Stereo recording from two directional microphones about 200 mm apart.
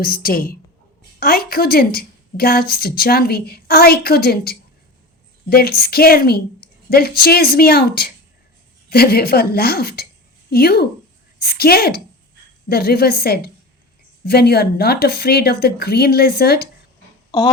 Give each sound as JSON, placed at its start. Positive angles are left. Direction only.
{"t": 0.0, "sound": "a woman's voice", "side_deg": 45}